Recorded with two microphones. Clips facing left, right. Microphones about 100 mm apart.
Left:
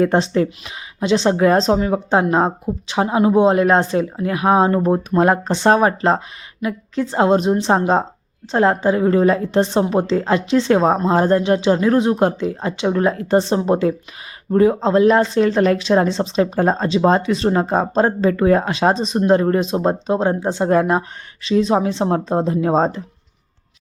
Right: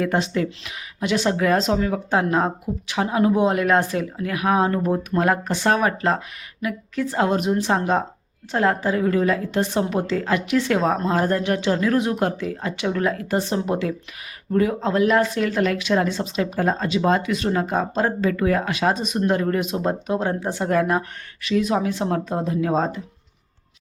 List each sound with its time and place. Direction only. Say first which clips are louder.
0.0 s speech: left 6 dB; 30° left (ahead or behind)